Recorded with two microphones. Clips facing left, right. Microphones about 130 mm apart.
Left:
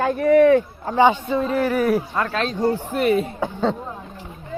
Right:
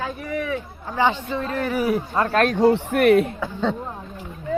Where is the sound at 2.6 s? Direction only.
75° right (ahead or behind).